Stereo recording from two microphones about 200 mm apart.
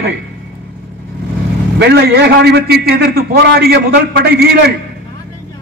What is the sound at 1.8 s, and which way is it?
A man's voice, 55° right (ahead or behind).